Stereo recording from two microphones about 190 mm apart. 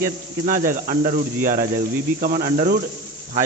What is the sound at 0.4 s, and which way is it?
A man's voice, 45° right (ahead or behind).